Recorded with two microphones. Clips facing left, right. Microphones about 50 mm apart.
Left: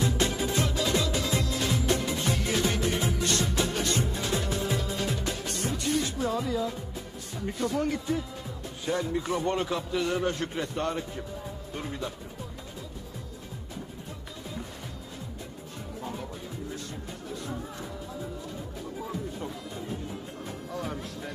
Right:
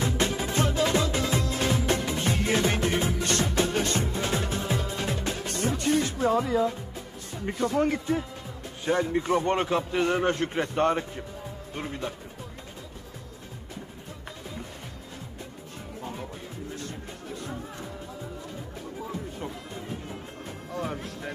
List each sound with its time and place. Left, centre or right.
0.0 s music: right
7.3 s a man's voice: right
17.6 s music: centre
20.7 s speech: right